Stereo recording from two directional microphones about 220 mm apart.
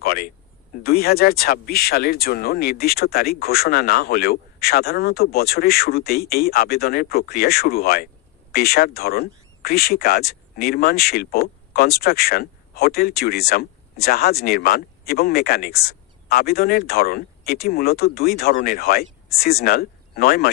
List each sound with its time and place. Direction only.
0.0 s speech: 40° left (ahead or behind)